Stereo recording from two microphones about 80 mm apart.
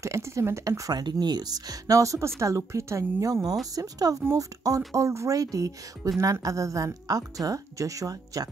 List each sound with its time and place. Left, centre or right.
0.0 s speech: right
1.2 s speech: right